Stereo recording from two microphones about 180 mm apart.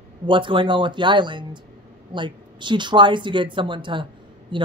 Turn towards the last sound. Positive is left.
turn(degrees=-25)  # may be behind; listen again after turning